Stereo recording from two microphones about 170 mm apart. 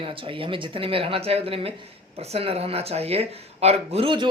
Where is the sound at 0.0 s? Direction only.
30° right (ahead or behind).